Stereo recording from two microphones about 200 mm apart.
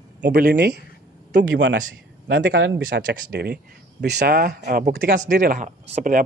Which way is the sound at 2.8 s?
55° right (ahead or behind).